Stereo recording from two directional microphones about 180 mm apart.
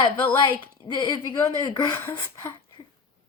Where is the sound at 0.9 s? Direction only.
25° left (ahead or behind).